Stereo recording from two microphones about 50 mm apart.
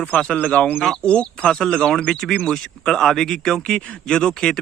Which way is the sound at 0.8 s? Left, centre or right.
Centre.